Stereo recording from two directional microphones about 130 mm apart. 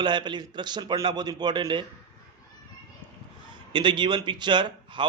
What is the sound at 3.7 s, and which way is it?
Speech, 40° right (ahead or behind).